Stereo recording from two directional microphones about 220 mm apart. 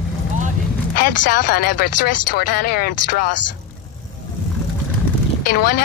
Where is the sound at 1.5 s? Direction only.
40° left (ahead or behind).